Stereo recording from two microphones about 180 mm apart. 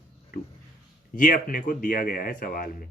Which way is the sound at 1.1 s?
50° left (ahead or behind).